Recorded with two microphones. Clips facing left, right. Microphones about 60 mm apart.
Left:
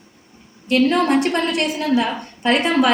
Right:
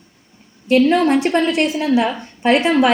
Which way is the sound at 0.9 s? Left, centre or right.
Right.